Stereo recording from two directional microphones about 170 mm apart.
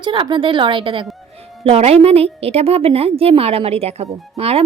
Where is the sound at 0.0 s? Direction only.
30° right (ahead or behind).